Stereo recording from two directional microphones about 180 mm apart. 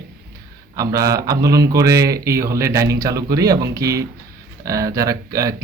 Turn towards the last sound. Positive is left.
turn(degrees=-20)  # may be behind; listen again after turning